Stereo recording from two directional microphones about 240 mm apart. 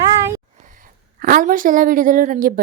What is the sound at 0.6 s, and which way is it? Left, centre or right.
A woman's voice, right.